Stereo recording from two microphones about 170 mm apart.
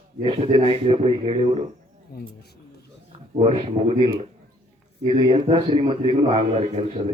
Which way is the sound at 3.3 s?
35° right (ahead or behind).